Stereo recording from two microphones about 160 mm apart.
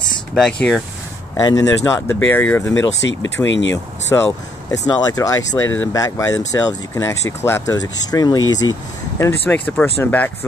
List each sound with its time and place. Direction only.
0.3 s speech: 5° left (ahead or behind)
1.4 s speech: 20° left (ahead or behind)
9.5 s speech: 10° left (ahead or behind)